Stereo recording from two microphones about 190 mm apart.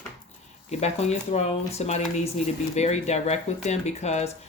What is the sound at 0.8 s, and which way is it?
Speech, 35° left (ahead or behind).